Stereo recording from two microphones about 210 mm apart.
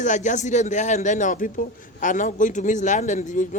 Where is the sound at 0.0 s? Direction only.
35° left (ahead or behind).